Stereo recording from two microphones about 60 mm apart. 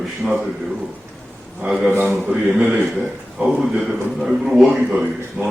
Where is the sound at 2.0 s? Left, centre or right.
Centre.